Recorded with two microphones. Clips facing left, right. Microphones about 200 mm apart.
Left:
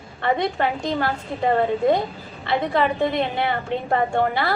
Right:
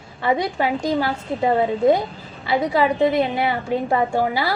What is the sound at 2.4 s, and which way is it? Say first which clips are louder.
A woman's voice: right 2 dB; 5° right (ahead or behind).